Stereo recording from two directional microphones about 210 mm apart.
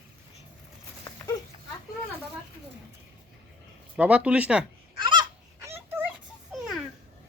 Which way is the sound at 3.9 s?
5° right (ahead or behind).